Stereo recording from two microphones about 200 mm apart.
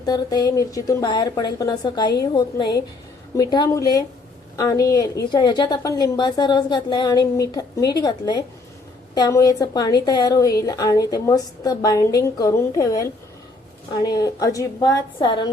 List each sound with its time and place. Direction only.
0.0 s a woman's voice: 20° left (ahead or behind)